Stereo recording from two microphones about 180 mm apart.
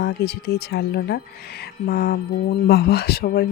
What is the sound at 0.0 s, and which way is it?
Speech, 65° left (ahead or behind).